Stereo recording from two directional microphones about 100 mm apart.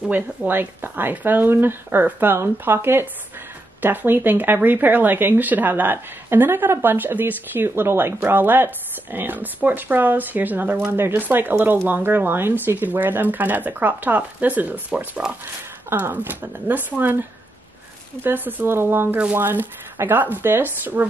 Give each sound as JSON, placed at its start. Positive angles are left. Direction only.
{"t": 0.0, "sound": "speech", "side_deg": -5}
{"t": 0.5, "sound": "speech", "side_deg": -20}